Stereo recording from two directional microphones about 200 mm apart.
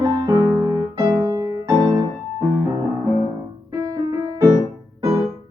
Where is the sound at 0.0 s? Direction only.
20° right (ahead or behind).